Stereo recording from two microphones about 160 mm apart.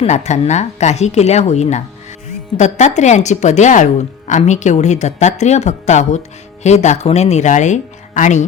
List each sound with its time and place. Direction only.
0.0 s speech: 45° left (ahead or behind)